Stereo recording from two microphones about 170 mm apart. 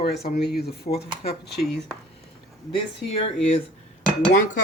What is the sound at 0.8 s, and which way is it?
Speech, 35° left (ahead or behind).